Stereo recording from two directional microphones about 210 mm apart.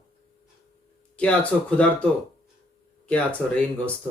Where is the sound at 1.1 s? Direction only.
5° left (ahead or behind).